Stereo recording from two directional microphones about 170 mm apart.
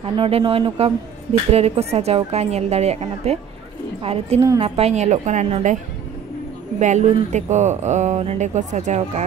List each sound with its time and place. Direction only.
0.0 s a woman's voice: 35° right (ahead or behind)
6.8 s speech: 45° right (ahead or behind)